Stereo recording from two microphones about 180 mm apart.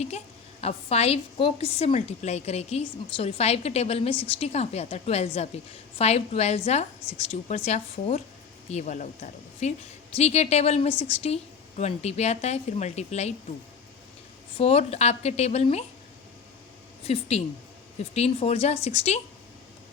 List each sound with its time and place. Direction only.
0.6 s a woman's voice: 35° left (ahead or behind)
14.6 s a woman's voice: 35° left (ahead or behind)
17.0 s a woman's voice: 35° left (ahead or behind)